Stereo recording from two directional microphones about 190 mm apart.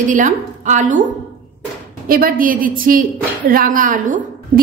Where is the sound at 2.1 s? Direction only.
50° right (ahead or behind).